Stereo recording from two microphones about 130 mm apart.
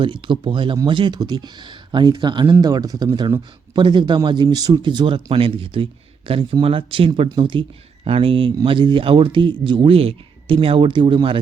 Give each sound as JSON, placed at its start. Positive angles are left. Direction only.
{"t": 0.0, "sound": "speech", "side_deg": -40}